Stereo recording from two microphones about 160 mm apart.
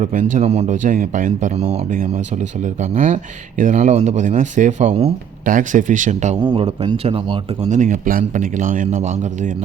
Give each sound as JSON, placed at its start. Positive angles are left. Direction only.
{"t": 0.0, "sound": "speech", "side_deg": -55}
{"t": 2.9, "sound": "speech", "side_deg": -55}
{"t": 5.5, "sound": "speech", "side_deg": -55}
{"t": 6.4, "sound": "a man's voice", "side_deg": -30}
{"t": 7.7, "sound": "speech", "side_deg": -50}